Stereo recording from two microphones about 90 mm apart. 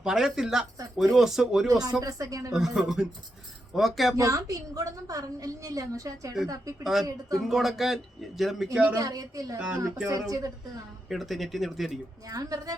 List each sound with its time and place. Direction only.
0.0 s speech: 5° right (ahead or behind)
1.6 s a woman's voice: 40° right (ahead or behind)
2.5 s speech: 5° right (ahead or behind)
4.2 s a woman's voice: 40° right (ahead or behind)
7.4 s speech: centre (ahead or behind)
8.9 s a woman's voice: 40° right (ahead or behind)
11.1 s speech: centre (ahead or behind)
12.2 s a woman's voice: 45° right (ahead or behind)